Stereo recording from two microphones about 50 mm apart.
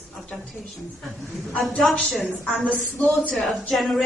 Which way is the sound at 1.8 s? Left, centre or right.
Centre.